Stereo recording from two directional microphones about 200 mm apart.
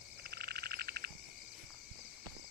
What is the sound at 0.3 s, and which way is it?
Frog, 50° right (ahead or behind).